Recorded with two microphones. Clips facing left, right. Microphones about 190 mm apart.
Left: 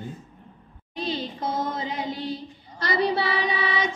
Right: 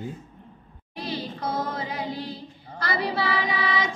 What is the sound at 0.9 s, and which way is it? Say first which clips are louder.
Music: left 2 dB; 25° left (ahead or behind).